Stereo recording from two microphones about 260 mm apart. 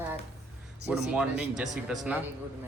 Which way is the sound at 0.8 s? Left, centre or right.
Centre.